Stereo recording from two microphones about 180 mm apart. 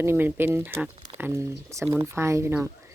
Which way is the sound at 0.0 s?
10° right (ahead or behind).